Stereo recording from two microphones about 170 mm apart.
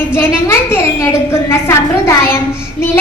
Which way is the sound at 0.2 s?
15° left (ahead or behind).